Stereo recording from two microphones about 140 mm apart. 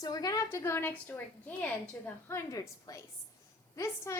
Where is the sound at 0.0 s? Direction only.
30° left (ahead or behind).